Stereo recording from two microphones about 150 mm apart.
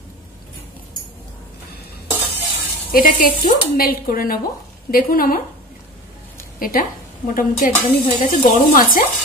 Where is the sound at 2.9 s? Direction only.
70° left (ahead or behind).